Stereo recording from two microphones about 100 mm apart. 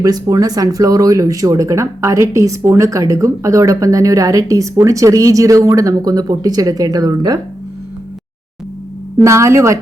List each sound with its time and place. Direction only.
0.0 s speech: 40° right (ahead or behind)
9.1 s a woman's voice: 30° right (ahead or behind)